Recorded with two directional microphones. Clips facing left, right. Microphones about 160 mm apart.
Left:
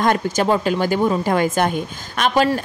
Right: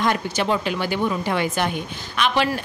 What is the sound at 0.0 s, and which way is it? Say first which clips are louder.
A woman's voice: left 4 dB; 45° left (ahead or behind).